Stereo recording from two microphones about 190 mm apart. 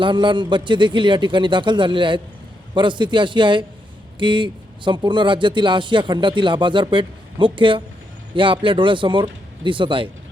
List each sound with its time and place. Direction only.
0.0 s a man's voice: 25° right (ahead or behind)